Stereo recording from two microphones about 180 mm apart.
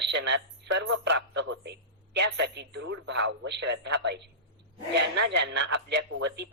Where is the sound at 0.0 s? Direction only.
75° right (ahead or behind).